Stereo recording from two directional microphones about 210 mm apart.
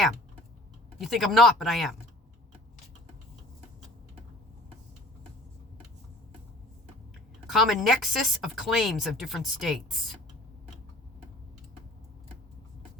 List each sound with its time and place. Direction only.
0.9 s speech: centre (ahead or behind)
7.5 s speech: centre (ahead or behind)